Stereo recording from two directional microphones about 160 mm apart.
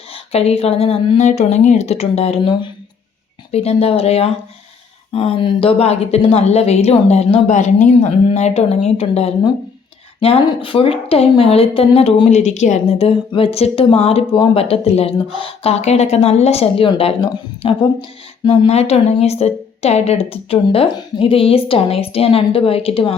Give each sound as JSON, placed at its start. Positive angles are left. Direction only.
{"t": 0.1, "sound": "a woman's voice", "side_deg": 40}